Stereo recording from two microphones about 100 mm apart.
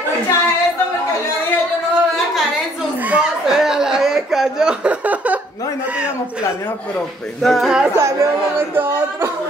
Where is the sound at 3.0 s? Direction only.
10° right (ahead or behind).